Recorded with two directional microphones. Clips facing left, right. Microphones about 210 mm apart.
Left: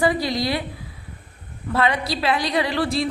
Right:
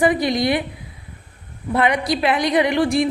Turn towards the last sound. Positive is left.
turn(degrees=-15)  # may be behind; listen again after turning